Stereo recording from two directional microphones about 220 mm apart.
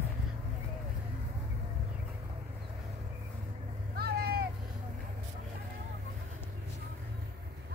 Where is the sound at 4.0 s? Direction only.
45° right (ahead or behind).